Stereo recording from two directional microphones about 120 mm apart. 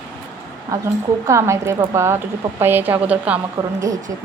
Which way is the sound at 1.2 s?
25° right (ahead or behind).